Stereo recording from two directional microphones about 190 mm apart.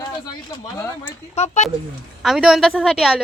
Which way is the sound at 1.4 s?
35° left (ahead or behind).